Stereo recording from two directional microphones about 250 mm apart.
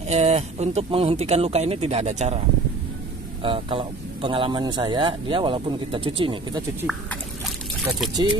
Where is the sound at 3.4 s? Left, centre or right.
Right.